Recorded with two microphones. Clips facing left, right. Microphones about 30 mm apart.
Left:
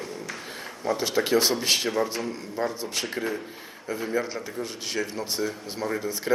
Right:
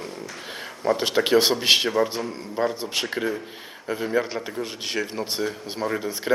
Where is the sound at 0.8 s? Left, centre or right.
Right.